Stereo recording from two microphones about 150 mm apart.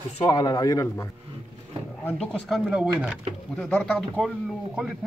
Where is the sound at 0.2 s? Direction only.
30° left (ahead or behind).